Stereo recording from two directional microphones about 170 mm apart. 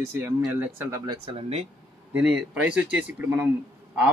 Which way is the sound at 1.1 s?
35° right (ahead or behind).